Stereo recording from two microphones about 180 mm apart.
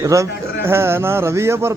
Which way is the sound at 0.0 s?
15° right (ahead or behind).